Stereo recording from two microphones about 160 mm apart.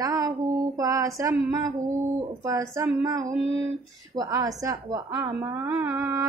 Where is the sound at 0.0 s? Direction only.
20° right (ahead or behind).